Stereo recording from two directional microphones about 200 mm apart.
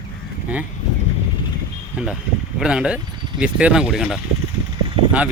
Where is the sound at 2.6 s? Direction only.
5° right (ahead or behind).